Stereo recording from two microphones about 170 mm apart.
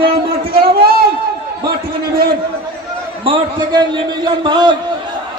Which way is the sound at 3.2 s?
30° right (ahead or behind).